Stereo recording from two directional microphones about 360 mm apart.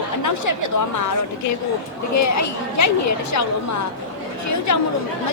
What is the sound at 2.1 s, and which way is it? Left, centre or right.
Speech, left.